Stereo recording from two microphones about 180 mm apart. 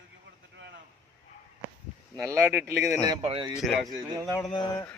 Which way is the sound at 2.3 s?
15° right (ahead or behind).